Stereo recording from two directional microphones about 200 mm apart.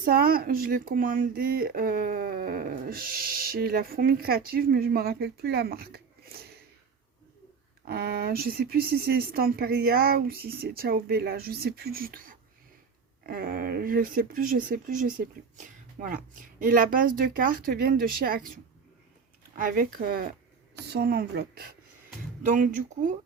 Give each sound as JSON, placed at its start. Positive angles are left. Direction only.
{"t": 0.0, "sound": "speech", "side_deg": -50}
{"t": 7.9, "sound": "speech", "side_deg": -50}
{"t": 19.5, "sound": "speech", "side_deg": -45}
{"t": 22.4, "sound": "speech", "side_deg": -40}